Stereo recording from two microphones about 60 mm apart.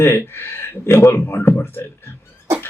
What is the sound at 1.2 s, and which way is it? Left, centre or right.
Speech, left.